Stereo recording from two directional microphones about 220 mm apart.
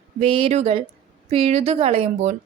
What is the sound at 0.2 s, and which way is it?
A woman's voice, 25° right (ahead or behind).